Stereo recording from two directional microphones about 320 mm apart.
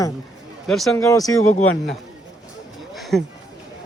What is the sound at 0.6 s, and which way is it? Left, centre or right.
Speech, centre.